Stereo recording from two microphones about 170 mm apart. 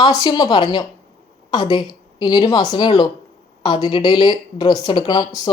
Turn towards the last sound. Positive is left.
turn(degrees=20)  # may be behind; listen again after turning